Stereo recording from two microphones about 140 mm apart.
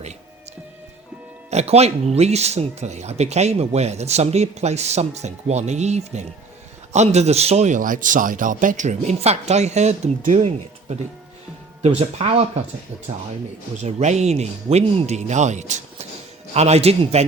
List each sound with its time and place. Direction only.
1.5 s a man's voice: 50° right (ahead or behind)
13.8 s speech: 55° right (ahead or behind)